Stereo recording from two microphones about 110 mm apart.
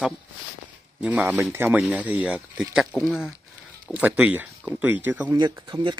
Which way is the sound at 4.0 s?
10° right (ahead or behind).